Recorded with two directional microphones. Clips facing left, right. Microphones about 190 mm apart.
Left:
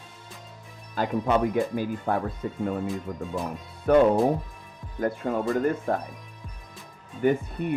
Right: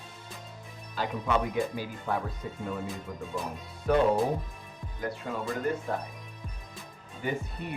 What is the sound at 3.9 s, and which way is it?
Speech, 55° left (ahead or behind).